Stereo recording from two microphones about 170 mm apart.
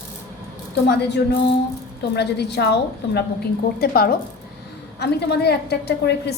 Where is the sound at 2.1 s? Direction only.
80° left.